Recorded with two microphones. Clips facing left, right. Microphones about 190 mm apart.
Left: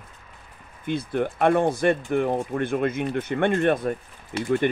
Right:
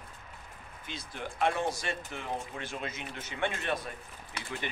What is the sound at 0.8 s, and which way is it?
Speech, 55° left (ahead or behind).